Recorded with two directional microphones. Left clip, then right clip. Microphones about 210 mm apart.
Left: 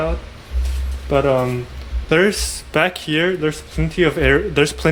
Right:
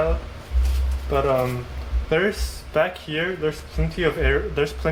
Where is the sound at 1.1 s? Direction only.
45° left (ahead or behind).